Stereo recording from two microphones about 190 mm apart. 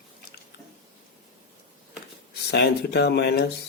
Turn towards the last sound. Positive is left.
turn(degrees=60)  # may be behind; listen again after turning